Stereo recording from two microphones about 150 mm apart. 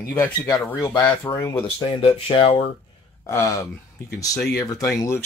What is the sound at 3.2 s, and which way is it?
Speech, 20° left (ahead or behind).